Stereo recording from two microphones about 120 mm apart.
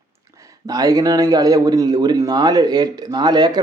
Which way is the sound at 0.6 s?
30° right (ahead or behind).